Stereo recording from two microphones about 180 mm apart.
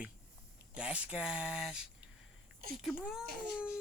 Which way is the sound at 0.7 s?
5° right (ahead or behind).